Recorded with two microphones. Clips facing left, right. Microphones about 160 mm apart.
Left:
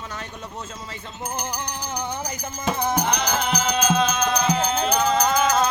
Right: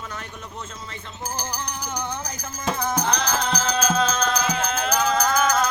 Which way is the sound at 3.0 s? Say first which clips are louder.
Left 1 dB; 10° left (ahead or behind).